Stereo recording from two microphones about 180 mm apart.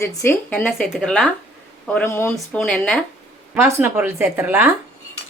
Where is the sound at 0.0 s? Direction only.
15° left (ahead or behind).